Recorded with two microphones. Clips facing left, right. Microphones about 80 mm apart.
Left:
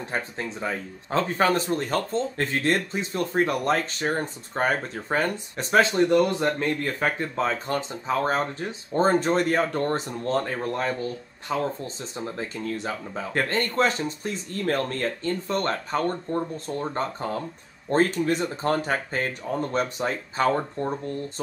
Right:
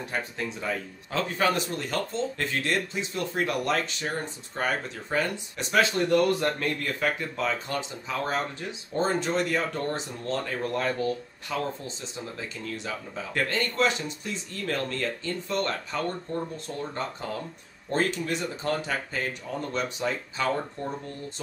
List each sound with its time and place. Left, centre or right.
0.1 s speech: left
5.9 s speech: left
10.7 s speech: left